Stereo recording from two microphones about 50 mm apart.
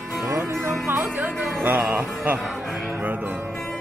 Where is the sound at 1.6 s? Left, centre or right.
Right.